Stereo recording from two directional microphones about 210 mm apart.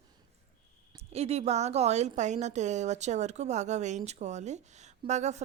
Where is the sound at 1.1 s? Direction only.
30° right (ahead or behind).